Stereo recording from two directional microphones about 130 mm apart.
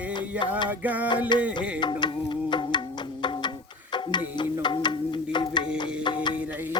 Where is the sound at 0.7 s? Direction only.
15° right (ahead or behind).